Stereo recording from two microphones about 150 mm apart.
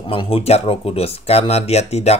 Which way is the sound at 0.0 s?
35° left (ahead or behind).